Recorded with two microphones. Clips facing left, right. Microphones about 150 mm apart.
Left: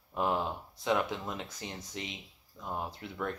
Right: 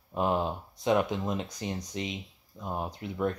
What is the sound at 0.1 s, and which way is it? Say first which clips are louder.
Speech: right 3 dB; 20° right (ahead or behind).